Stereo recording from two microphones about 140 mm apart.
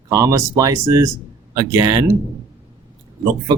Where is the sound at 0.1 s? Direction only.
20° right (ahead or behind).